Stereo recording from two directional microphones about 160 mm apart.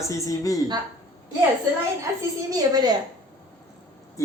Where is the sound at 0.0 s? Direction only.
20° left (ahead or behind).